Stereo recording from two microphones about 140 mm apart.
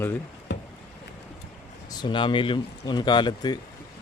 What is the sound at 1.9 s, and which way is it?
Speech, 30° left (ahead or behind).